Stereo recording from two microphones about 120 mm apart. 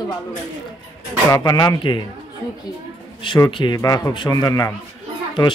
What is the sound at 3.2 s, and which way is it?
A man's voice, 40° left (ahead or behind).